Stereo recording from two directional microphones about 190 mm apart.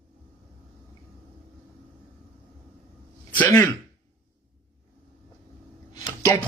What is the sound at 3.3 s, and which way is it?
Speech, 10° left (ahead or behind).